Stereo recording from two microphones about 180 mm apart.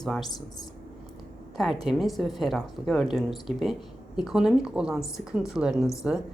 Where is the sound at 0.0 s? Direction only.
5° left (ahead or behind).